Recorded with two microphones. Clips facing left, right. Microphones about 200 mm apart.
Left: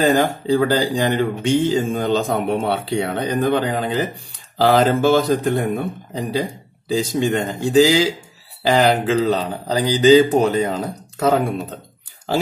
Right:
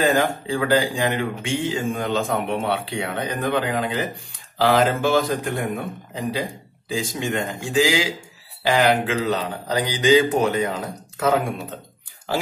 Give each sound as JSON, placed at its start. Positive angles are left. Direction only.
{"t": 0.0, "sound": "speech", "side_deg": 35}
{"t": 6.9, "sound": "speech", "side_deg": 35}